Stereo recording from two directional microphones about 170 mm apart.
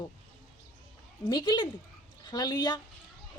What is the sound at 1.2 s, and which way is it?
A woman's voice, 25° left (ahead or behind).